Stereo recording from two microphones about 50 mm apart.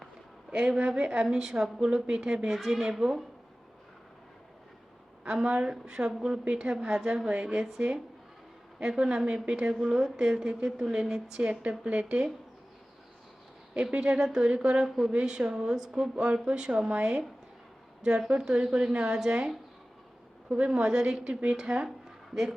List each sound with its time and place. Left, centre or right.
0.5 s a woman's voice: centre
5.2 s a woman's voice: centre
13.7 s a woman's voice: centre
14.8 s a woman's voice: centre
15.1 s a woman's voice: centre
18.3 s a woman's voice: centre